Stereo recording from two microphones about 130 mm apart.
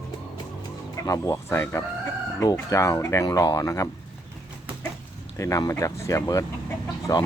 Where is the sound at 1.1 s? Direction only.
25° left (ahead or behind).